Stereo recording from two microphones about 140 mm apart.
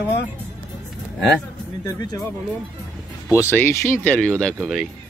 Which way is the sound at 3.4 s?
20° left (ahead or behind).